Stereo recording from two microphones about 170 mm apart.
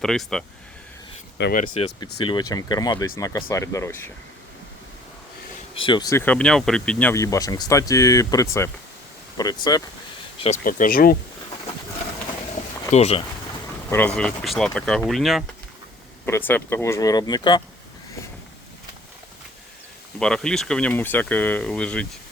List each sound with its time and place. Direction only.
0.0 s speech: 5° left (ahead or behind)
1.4 s speech: 90° left
1.8 s speech: 35° left (ahead or behind)
2.2 s speech: 25° left (ahead or behind)
5.8 s speech: 25° left (ahead or behind); by 7.1 s 5° left (ahead or behind)
7.1 s speech: 20° left (ahead or behind)
10.3 s a sound: 35° left (ahead or behind)
10.6 s speech: 55° left (ahead or behind)
12.9 s speech: 40° left (ahead or behind)
13.9 s speech: 5° left (ahead or behind)
16.2 s speech: 10° left (ahead or behind)
20.1 s speech: 5° left (ahead or behind)